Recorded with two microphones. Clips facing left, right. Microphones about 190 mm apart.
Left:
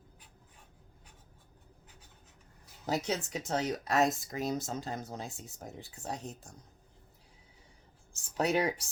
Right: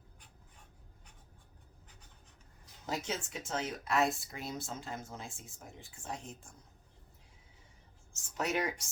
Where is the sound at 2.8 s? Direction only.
40° left (ahead or behind).